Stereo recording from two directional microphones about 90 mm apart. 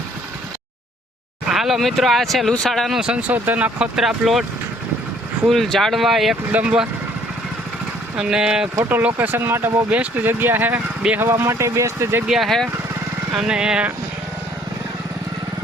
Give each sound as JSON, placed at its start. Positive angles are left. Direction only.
{"t": 1.5, "sound": "speech", "side_deg": -5}
{"t": 3.9, "sound": "speech", "side_deg": -5}
{"t": 5.5, "sound": "speech", "side_deg": 5}
{"t": 6.5, "sound": "speech", "side_deg": -15}
{"t": 8.1, "sound": "speech", "side_deg": -5}
{"t": 8.9, "sound": "speech", "side_deg": -20}
{"t": 12.3, "sound": "speech", "side_deg": 0}